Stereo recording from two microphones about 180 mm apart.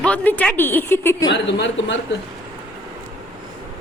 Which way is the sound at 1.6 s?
90° left.